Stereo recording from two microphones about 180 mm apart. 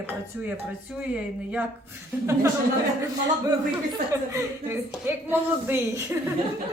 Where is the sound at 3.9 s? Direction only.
15° right (ahead or behind).